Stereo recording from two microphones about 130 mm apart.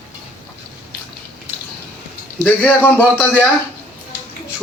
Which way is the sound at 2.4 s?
15° left (ahead or behind).